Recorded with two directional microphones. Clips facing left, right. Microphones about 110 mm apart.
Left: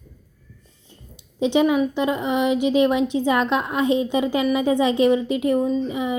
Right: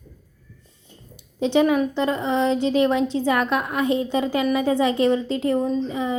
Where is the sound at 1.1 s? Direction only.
20° left (ahead or behind).